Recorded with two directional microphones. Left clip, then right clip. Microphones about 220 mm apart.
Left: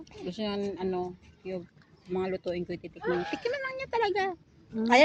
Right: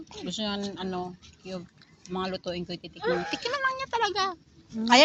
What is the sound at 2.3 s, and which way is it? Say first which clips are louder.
Speech: left 1 dB; 90° right.